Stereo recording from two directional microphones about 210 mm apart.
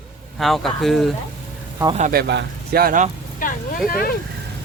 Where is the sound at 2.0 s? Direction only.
45° right (ahead or behind).